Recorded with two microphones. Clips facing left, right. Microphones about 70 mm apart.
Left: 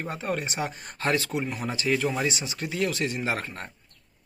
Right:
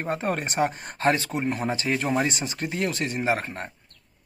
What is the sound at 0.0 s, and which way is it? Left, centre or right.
Speech, right.